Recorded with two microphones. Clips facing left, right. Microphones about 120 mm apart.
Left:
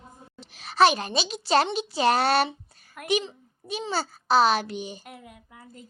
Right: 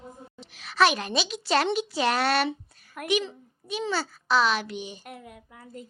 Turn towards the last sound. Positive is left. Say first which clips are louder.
# right 1 dB
turn(degrees=5)  # may be behind; listen again after turning